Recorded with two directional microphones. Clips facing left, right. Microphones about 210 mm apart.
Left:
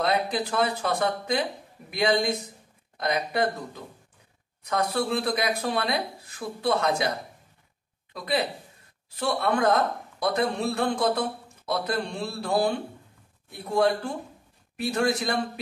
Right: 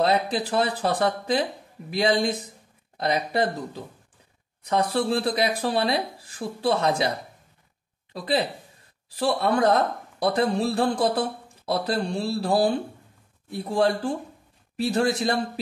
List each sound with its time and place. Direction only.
0.0 s a man's voice: 30° right (ahead or behind)
8.1 s a man's voice: 30° right (ahead or behind)